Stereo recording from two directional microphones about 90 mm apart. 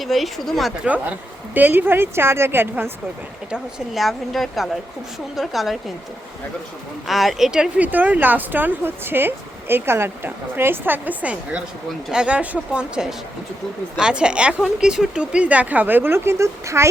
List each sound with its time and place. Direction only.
0.0 s speech: centre (ahead or behind)
0.9 s speech: 15° right (ahead or behind)
3.5 s speech: centre (ahead or behind)
7.1 s speech: centre (ahead or behind)
7.9 s speech: 20° right (ahead or behind)